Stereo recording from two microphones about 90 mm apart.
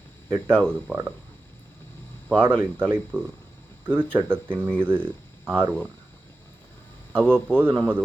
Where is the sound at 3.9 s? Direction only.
25° right (ahead or behind).